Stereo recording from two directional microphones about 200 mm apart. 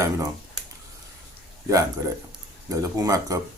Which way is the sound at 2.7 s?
15° right (ahead or behind).